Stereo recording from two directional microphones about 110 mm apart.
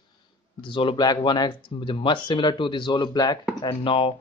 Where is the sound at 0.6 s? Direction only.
50° left (ahead or behind).